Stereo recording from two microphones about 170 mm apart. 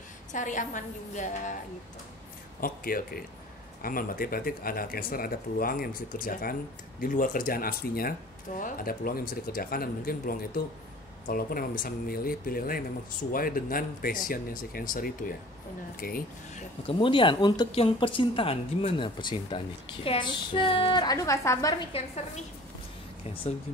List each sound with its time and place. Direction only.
0.3 s a woman's voice: 45° left (ahead or behind)
2.6 s speech: 60° left (ahead or behind)
16.8 s speech: 30° left (ahead or behind)
21.9 s a woman's voice: 40° left (ahead or behind)